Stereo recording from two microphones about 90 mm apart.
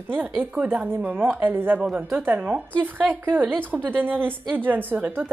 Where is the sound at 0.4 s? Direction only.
20° right (ahead or behind).